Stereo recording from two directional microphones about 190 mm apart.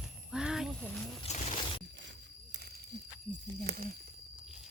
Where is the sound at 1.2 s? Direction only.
35° left (ahead or behind).